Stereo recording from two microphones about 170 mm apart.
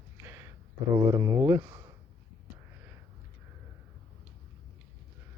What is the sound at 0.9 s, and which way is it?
Speech, 15° right (ahead or behind).